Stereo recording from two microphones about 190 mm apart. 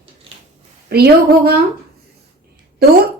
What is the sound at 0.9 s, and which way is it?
Speech, 55° right (ahead or behind).